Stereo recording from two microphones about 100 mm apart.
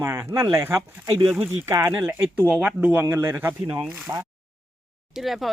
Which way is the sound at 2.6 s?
15° right (ahead or behind).